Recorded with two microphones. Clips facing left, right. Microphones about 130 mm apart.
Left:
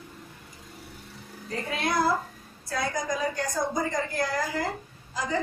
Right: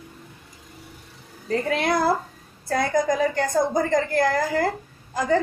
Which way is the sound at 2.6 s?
55° right (ahead or behind).